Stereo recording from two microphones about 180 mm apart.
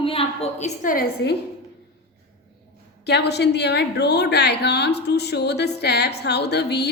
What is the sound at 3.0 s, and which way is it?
A woman's voice, 65° left (ahead or behind).